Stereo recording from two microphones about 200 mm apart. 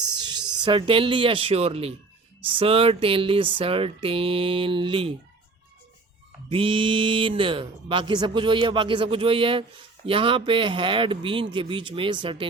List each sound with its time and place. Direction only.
0.0 s speech: 20° right (ahead or behind)
6.5 s speech: 25° right (ahead or behind)